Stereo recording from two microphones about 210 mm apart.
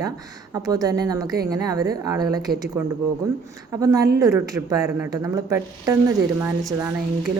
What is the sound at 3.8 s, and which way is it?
Speech, 15° right (ahead or behind).